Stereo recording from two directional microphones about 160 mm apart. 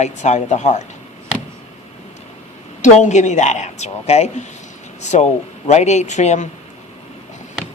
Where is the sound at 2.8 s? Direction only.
50° left (ahead or behind).